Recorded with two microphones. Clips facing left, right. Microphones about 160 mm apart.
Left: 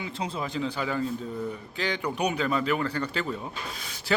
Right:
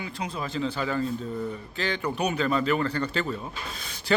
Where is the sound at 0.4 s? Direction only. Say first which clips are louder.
Right 3 dB; 15° left (ahead or behind).